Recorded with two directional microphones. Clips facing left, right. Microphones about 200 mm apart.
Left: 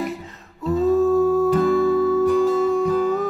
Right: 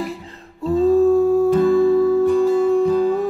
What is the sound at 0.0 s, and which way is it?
Music, 30° right (ahead or behind).